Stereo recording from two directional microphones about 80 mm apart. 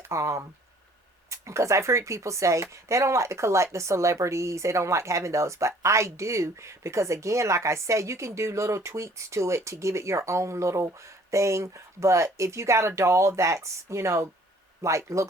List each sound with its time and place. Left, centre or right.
0.0 s speech: right